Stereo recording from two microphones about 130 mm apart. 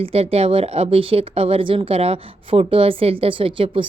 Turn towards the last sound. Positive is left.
turn(degrees=-45)  # may be behind; listen again after turning